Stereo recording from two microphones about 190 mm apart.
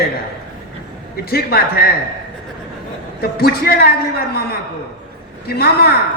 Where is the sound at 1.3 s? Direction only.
55° left (ahead or behind).